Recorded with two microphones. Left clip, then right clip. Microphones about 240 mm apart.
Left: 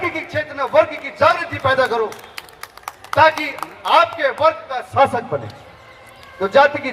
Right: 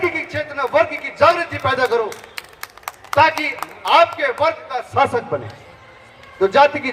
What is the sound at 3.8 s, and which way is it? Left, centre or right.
A man's voice, right.